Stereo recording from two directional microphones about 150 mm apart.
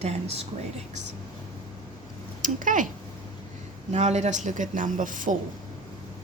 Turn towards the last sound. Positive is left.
turn(degrees=-60)  # may be behind; listen again after turning